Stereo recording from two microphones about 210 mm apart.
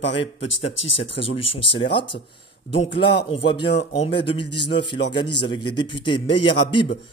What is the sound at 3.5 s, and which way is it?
A man's voice, 25° left (ahead or behind).